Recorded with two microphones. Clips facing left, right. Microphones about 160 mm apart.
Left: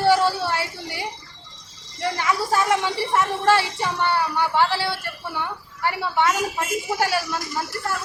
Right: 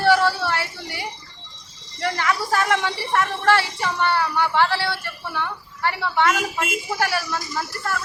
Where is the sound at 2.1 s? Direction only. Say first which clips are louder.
Left 1 dB; 15° left (ahead or behind).